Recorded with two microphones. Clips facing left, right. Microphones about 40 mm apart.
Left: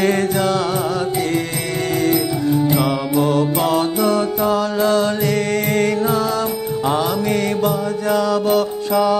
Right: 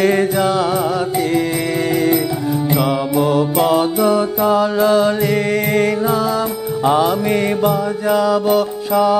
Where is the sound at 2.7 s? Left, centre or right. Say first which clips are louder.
Right 1 dB; centre.